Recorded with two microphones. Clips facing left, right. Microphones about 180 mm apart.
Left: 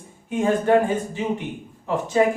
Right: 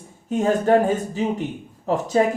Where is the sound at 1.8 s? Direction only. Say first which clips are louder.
Right 3 dB; 40° right (ahead or behind).